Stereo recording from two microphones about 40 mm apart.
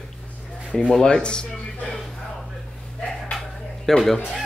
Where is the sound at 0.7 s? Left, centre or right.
Left.